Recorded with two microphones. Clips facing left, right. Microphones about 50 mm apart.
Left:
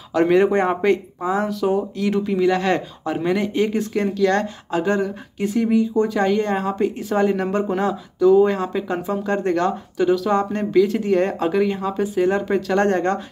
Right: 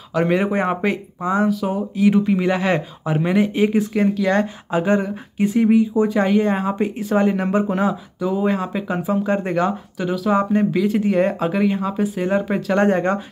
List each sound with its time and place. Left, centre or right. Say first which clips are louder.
0.1 s speech: left 3 dB; centre
2.3 s speech: left 1 dB; right
2.6 s speech: even; centre